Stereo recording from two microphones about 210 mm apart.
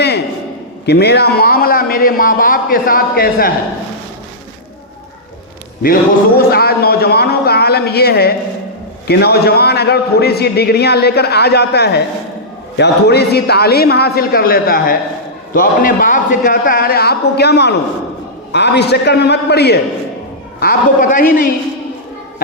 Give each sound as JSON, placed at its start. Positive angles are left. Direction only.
{"t": 0.9, "sound": "a man's voice", "side_deg": 50}
{"t": 5.8, "sound": "a man's voice", "side_deg": 45}
{"t": 20.6, "sound": "a man's voice", "side_deg": 40}